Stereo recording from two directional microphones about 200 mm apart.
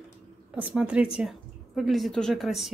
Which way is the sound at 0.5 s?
5° right (ahead or behind).